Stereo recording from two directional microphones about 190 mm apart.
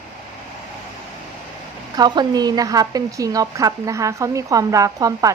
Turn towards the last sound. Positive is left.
turn(degrees=-20)  # may be behind; listen again after turning